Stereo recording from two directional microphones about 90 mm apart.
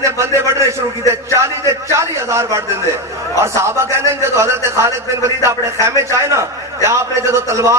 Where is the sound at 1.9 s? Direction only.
30° right (ahead or behind).